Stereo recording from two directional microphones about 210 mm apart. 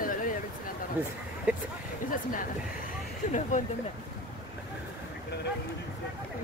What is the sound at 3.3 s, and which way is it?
Speech, 35° left (ahead or behind).